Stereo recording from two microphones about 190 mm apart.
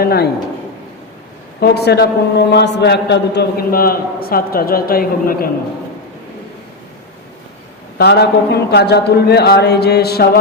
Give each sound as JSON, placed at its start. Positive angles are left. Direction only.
{"t": 0.0, "sound": "a man's voice", "side_deg": 55}
{"t": 1.6, "sound": "a man's voice", "side_deg": 60}
{"t": 7.9, "sound": "a man's voice", "side_deg": 60}